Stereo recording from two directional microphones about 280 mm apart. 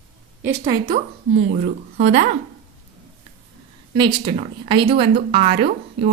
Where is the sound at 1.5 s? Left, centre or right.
Right.